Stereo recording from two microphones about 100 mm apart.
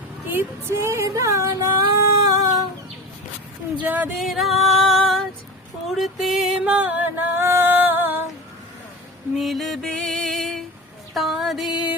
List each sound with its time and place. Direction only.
0.3 s a sound: 25° right (ahead or behind)
3.8 s music: 15° right (ahead or behind)
4.2 s female singing: centre (ahead or behind)
6.7 s music: 15° right (ahead or behind)
9.4 s music: centre (ahead or behind)